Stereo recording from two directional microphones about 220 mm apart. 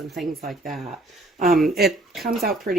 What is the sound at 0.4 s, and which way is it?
Speech, 40° right (ahead or behind).